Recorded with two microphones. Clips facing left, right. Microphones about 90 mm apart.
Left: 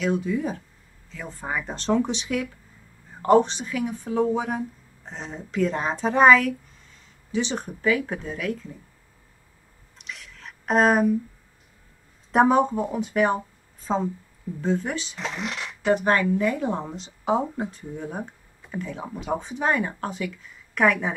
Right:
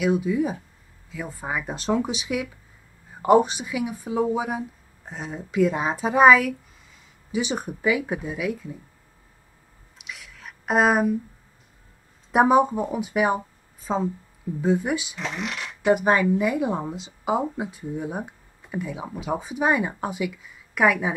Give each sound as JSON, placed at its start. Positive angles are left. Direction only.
{"t": 0.0, "sound": "speech", "side_deg": -10}
{"t": 9.9, "sound": "a sound", "side_deg": -5}
{"t": 12.3, "sound": "speech", "side_deg": -10}